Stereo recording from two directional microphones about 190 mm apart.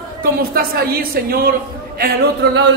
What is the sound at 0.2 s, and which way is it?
A woman's voice, 50° right (ahead or behind).